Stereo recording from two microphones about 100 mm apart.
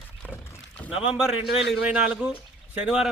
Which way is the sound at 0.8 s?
10° right (ahead or behind).